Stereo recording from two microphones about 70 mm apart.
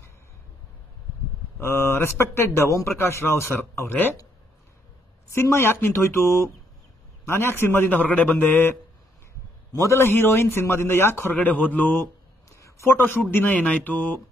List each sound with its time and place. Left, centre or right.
1.6 s a man's voice: left
5.3 s a man's voice: left
9.8 s a man's voice: left
11.3 s a man's voice: left
12.4 s a sound: left
12.9 s a man's voice: left